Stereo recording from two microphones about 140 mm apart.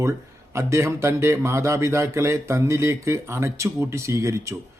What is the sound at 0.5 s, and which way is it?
Speech, 20° right (ahead or behind).